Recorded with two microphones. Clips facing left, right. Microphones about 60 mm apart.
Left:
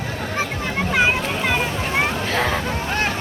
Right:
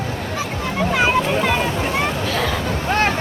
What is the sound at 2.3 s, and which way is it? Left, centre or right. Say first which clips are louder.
Speech: left 1 dB; left.